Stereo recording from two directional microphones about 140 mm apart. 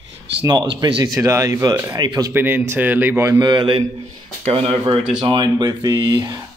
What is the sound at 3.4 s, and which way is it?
A man's voice, 35° right (ahead or behind).